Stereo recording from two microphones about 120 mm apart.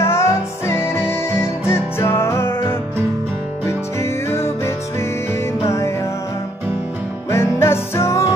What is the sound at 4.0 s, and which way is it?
Music, 25° left (ahead or behind).